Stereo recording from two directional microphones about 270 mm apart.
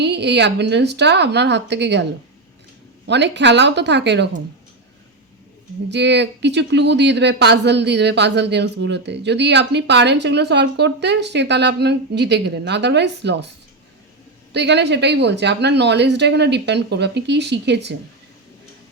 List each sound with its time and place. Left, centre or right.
0.0 s speech: right
3.1 s speech: right
5.9 s speech: right
14.5 s speech: right